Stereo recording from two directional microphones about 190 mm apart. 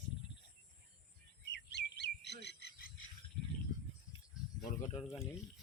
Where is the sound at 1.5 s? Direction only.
65° left (ahead or behind).